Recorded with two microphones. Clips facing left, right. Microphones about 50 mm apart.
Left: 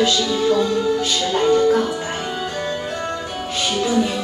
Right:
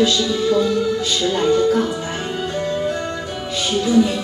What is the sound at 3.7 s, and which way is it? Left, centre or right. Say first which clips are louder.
Music: right 4 dB; left.